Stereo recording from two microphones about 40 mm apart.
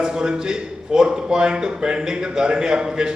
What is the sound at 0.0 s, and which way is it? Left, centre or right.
Speech, centre.